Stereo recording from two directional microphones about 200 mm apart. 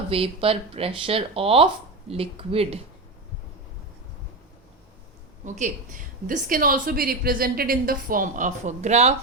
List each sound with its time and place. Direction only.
0.1 s speech: 30° right (ahead or behind)
5.5 s a woman's voice: 40° right (ahead or behind)